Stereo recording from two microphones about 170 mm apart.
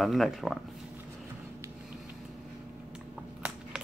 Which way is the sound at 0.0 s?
Centre (ahead or behind).